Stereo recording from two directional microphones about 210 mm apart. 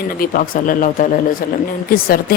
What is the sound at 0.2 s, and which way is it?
A woman's voice, 40° left (ahead or behind).